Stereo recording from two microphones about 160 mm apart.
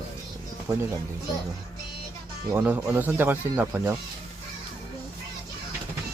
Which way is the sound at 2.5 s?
10° right (ahead or behind).